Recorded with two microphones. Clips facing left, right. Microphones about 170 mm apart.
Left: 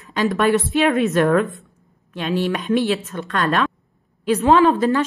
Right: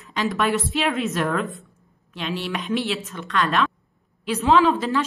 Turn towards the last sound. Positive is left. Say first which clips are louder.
# left 4 dB
turn(degrees=45)  # may be behind; listen again after turning